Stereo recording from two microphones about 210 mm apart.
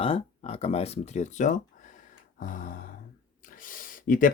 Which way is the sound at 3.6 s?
40° left (ahead or behind).